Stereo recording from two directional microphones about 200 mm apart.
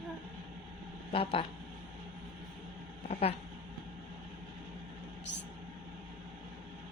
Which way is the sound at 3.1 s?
30° left (ahead or behind).